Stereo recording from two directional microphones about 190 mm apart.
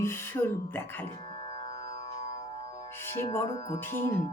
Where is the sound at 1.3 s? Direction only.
25° left (ahead or behind).